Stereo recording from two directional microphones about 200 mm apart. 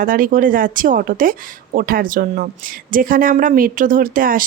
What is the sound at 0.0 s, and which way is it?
Speech, 45° right (ahead or behind).